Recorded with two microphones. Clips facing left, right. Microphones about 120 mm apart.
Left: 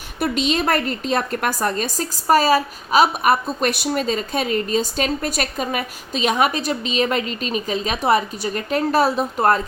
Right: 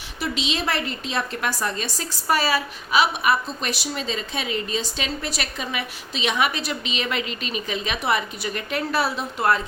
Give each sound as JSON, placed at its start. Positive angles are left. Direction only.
{"t": 0.2, "sound": "a woman's voice", "side_deg": 50}